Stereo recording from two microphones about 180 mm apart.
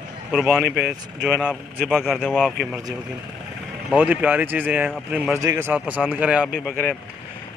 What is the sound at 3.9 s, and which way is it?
Speech, 10° right (ahead or behind).